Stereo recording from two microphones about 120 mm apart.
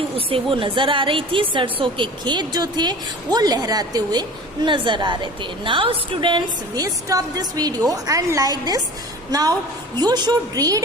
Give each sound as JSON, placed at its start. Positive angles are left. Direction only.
{"t": 0.3, "sound": "a woman's voice", "side_deg": -50}
{"t": 6.8, "sound": "a woman's voice", "side_deg": -30}